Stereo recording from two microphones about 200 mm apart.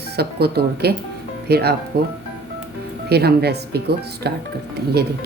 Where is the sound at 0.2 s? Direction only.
55° right (ahead or behind).